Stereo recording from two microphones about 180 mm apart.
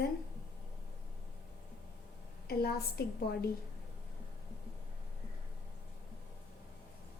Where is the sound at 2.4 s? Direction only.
60° left (ahead or behind).